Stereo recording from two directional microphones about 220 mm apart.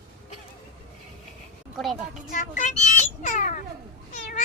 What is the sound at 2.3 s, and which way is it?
A child's voice, 35° left (ahead or behind).